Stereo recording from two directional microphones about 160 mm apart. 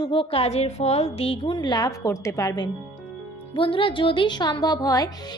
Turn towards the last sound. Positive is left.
turn(degrees=20)  # may be behind; listen again after turning